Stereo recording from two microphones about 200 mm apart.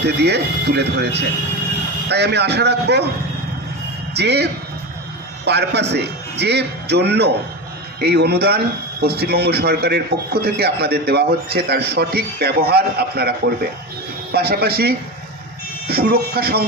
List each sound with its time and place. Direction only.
0.0 s speech: 55° right (ahead or behind)
4.1 s a man's voice: 55° right (ahead or behind)